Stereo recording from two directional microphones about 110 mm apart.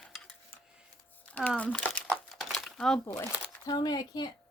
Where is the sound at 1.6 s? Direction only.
10° left (ahead or behind).